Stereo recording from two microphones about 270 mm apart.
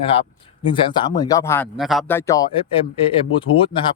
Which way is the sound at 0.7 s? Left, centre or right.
Centre.